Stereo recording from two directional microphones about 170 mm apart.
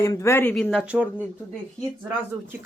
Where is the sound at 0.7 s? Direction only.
5° right (ahead or behind).